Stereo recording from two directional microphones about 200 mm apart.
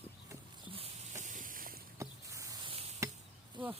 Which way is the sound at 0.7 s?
30° right (ahead or behind).